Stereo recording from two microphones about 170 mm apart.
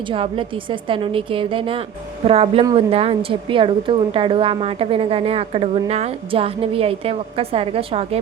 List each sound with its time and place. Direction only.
0.1 s a woman's voice: 30° right (ahead or behind)